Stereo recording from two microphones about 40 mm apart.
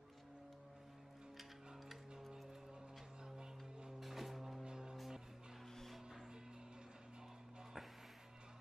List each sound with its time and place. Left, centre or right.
3.3 s music: centre
4.0 s music: centre
4.6 s music: centre